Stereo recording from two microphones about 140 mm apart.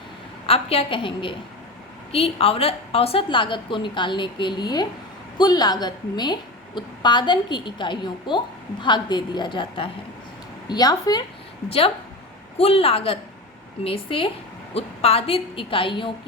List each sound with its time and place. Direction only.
0.4 s a woman's voice: 45° left (ahead or behind); by 11.2 s 30° left (ahead or behind)
12.5 s a woman's voice: 45° left (ahead or behind)